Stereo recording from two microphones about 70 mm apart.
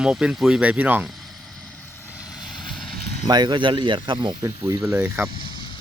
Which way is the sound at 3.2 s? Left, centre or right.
Right.